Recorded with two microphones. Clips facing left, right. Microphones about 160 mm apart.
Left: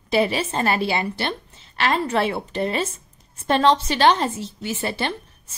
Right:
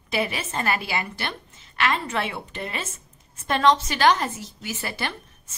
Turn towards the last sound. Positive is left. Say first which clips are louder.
# left 5 dB
turn(degrees=25)  # may be behind; listen again after turning